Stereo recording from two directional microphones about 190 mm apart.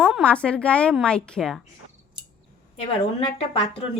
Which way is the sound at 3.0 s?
30° left (ahead or behind).